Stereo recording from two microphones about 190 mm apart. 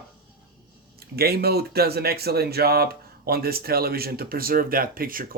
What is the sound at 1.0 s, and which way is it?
Speech, 55° right (ahead or behind).